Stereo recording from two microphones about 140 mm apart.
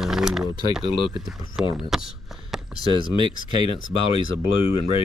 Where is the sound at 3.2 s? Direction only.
40° left (ahead or behind).